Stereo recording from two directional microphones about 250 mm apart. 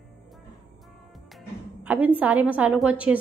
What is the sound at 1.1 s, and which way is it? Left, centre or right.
A woman's voice, centre.